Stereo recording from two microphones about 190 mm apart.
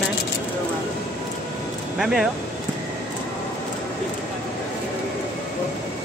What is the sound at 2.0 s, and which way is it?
Speech, centre (ahead or behind).